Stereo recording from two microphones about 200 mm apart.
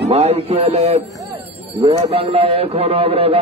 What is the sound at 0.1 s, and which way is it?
A man's voice, 30° right (ahead or behind).